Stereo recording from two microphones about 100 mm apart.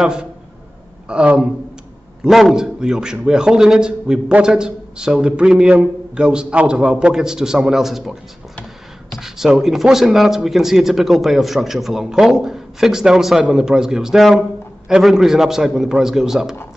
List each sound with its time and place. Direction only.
0.0 s a man's voice: 10° right (ahead or behind)